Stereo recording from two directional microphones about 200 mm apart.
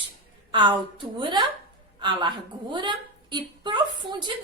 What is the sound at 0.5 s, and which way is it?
A woman's voice, 25° right (ahead or behind).